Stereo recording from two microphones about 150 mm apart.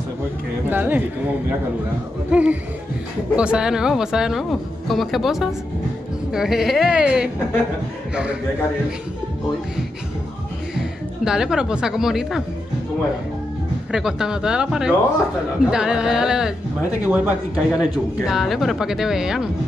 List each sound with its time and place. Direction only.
0.7 s speech: 10° right (ahead or behind)
2.3 s speech: 5° right (ahead or behind)
11.2 s speech: 5° right (ahead or behind)
13.9 s speech: 5° right (ahead or behind)